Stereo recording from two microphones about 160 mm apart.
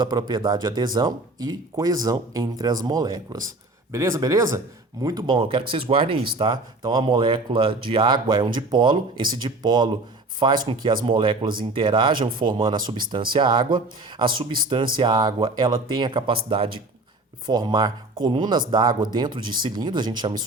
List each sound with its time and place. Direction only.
0.0 s speech: 25° right (ahead or behind)